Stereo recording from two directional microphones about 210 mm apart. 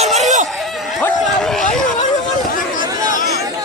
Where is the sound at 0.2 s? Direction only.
35° right (ahead or behind).